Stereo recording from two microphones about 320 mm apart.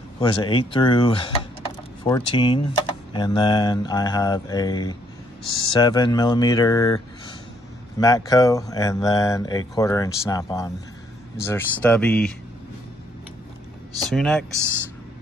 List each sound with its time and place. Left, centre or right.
0.2 s speech: centre
8.0 s speech: centre
14.0 s speech: centre